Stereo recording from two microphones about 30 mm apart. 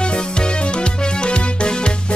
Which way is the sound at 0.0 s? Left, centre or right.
Left.